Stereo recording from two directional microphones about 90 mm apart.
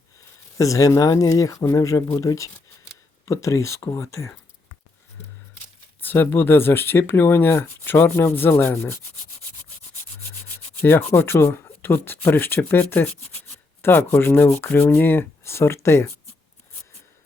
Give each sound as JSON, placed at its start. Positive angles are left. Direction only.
{"t": 0.5, "sound": "speech", "side_deg": 35}
{"t": 6.0, "sound": "speech", "side_deg": 20}
{"t": 10.8, "sound": "speech", "side_deg": 25}
{"t": 13.8, "sound": "speech", "side_deg": 25}